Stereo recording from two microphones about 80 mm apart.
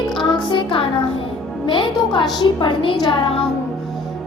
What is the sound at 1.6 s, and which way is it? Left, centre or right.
Speech, left.